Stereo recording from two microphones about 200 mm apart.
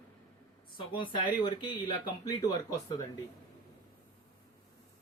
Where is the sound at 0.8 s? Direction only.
25° left (ahead or behind).